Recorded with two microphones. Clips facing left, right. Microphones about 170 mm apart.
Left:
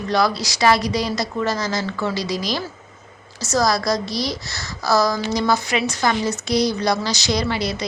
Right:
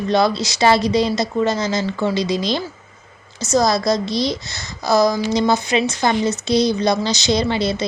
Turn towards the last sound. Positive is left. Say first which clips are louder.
# right 4 dB
turn(degrees=-25)  # may be behind; listen again after turning